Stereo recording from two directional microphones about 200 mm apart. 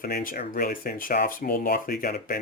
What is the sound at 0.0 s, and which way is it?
Speech, 45° left (ahead or behind).